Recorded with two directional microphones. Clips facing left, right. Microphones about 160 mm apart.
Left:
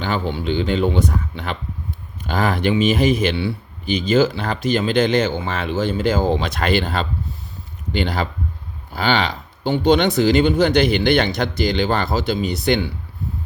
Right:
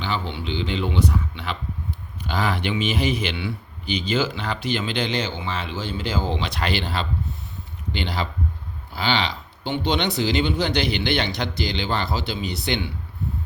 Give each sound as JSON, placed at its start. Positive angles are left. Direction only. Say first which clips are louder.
{"t": 0.0, "sound": "speech", "louder": "left 5 dB", "side_deg": 45}